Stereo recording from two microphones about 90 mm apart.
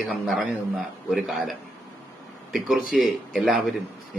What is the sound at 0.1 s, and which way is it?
Speech, centre (ahead or behind).